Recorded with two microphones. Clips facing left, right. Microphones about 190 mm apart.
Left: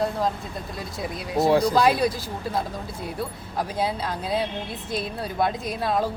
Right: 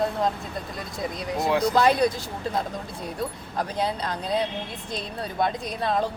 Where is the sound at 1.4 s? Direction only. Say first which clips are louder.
Left 4 dB; 35° left (ahead or behind).